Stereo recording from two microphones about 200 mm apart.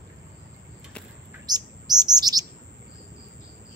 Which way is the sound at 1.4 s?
20° right (ahead or behind).